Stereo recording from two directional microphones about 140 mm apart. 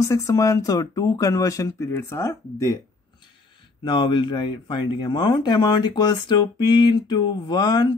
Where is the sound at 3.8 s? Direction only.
35° left (ahead or behind).